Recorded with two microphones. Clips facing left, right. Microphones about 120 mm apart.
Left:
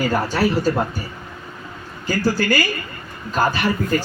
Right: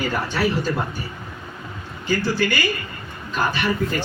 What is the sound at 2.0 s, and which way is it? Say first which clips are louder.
Speech: left 2 dB; 40° left (ahead or behind).